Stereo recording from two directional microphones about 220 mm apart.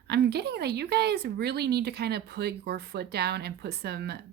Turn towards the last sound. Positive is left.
turn(degrees=-50)  # may be behind; listen again after turning